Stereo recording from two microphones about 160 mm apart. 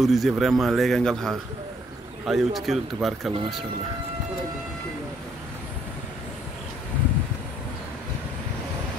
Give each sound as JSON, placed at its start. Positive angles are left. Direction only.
{"t": 0.0, "sound": "speech", "side_deg": 0}